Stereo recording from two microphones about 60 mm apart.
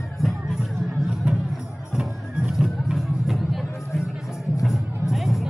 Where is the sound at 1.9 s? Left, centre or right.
Centre.